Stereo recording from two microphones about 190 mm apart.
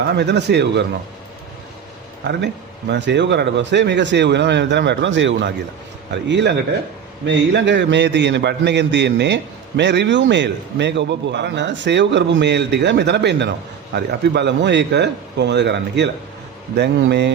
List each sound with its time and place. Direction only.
0.1 s a man's voice: 65° right (ahead or behind)
2.9 s a man's voice: 65° right (ahead or behind)